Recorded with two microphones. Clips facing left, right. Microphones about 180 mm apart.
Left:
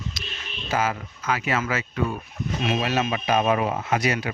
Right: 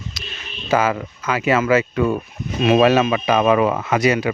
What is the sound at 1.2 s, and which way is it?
Speech, 85° right.